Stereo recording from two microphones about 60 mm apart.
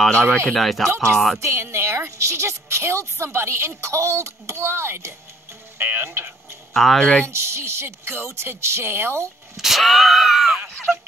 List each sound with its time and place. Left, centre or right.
0.1 s speech: centre
0.6 s a sound: centre
1.4 s a woman's voice: right
6.7 s speech: centre
7.0 s speech: centre
7.2 s a woman's voice: right
9.6 s a sound: centre